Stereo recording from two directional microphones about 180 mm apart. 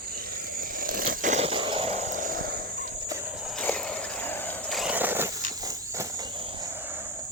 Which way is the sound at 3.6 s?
5° left (ahead or behind).